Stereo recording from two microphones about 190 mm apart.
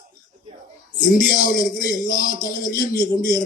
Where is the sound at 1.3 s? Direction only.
45° left (ahead or behind).